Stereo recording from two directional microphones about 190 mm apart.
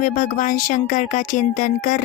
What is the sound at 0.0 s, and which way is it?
Speech, 45° left (ahead or behind).